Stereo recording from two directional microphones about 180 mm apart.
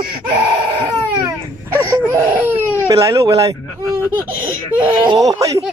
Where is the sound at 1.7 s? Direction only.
15° right (ahead or behind).